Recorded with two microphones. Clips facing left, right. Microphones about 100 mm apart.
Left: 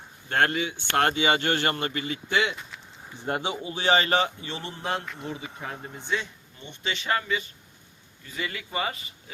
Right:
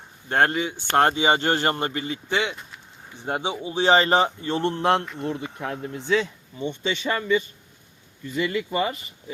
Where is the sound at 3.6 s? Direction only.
25° right (ahead or behind); by 4.6 s 40° right (ahead or behind).